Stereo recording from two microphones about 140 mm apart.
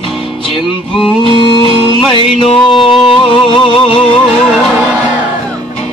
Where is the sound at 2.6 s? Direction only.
Centre (ahead or behind).